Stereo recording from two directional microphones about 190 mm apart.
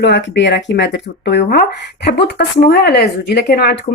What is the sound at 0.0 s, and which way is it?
Speech, 70° left (ahead or behind).